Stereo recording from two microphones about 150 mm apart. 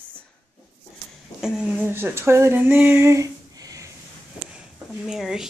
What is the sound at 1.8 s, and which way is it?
Speech, 15° right (ahead or behind).